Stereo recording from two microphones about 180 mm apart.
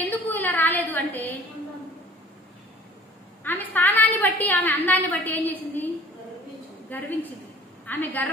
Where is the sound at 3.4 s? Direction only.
10° left (ahead or behind).